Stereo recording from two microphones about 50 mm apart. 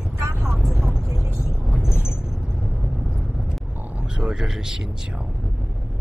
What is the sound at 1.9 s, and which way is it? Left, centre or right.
Vehicle, left.